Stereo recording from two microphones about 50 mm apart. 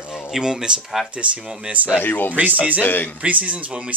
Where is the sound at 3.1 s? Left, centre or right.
Right.